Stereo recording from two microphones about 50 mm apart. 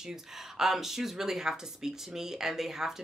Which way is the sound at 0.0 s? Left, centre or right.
Centre.